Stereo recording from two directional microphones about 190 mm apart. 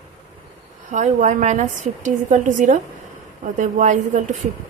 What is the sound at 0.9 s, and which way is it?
A woman's voice, 40° right (ahead or behind).